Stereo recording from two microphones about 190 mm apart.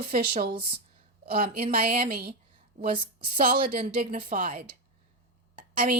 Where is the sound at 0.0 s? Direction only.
50° right (ahead or behind).